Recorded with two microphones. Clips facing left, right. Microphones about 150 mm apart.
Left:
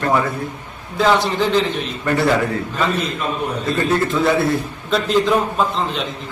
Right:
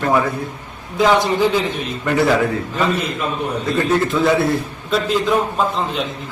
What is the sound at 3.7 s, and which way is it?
Speech, centre (ahead or behind).